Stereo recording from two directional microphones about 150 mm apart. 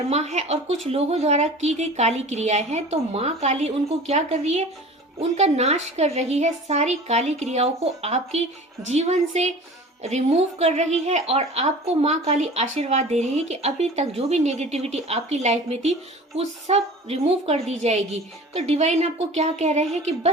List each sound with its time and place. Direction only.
0.1 s a woman's voice: 45° right (ahead or behind)